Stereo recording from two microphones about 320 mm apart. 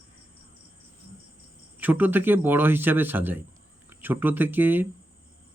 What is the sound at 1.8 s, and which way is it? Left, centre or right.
Speech, centre.